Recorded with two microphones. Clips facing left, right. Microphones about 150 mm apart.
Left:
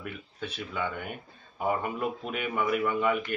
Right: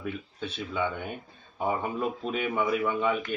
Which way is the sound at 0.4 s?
25° right (ahead or behind).